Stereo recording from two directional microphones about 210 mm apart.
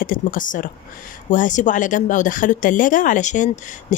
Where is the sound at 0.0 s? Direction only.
40° left (ahead or behind).